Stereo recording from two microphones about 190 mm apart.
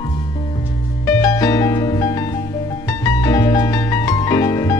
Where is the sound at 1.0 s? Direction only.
20° left (ahead or behind).